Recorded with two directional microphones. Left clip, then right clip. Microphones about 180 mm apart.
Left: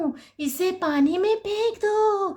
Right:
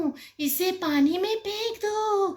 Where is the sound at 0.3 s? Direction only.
60° left (ahead or behind).